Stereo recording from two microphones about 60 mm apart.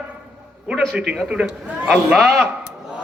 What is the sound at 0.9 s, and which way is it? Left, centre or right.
A man's voice, centre.